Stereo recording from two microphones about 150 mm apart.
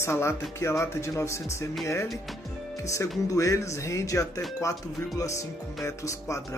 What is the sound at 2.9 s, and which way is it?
Speech, 20° left (ahead or behind).